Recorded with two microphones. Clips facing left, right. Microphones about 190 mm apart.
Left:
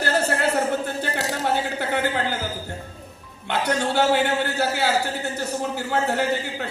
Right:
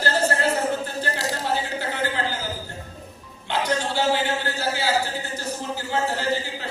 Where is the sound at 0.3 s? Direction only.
65° left (ahead or behind).